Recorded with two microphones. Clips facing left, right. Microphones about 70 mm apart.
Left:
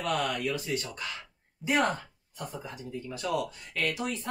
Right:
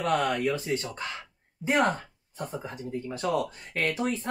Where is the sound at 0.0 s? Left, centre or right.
Right.